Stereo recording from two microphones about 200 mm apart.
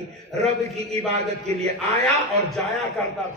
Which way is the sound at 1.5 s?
30° right (ahead or behind).